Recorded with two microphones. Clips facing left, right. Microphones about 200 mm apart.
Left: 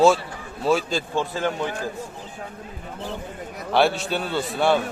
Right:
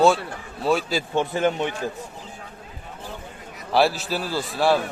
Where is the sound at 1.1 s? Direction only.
20° right (ahead or behind).